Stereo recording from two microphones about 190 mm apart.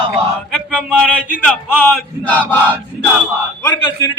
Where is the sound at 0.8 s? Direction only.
5° right (ahead or behind).